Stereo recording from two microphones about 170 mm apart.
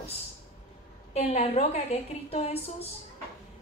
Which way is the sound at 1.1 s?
35° left (ahead or behind).